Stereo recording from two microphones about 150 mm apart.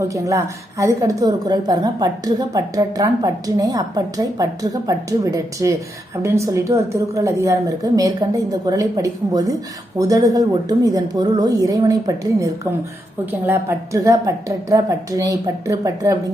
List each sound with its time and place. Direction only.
0.1 s a woman's voice: 20° right (ahead or behind)